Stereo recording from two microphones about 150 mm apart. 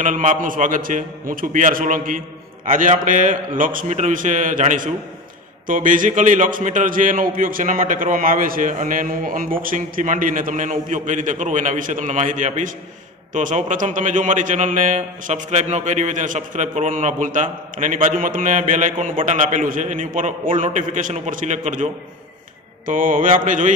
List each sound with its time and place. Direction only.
0.0 s a man's voice: 55° right (ahead or behind)
22.8 s a man's voice: 65° right (ahead or behind)